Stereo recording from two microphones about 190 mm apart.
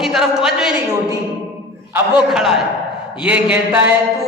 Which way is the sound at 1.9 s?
5° right (ahead or behind).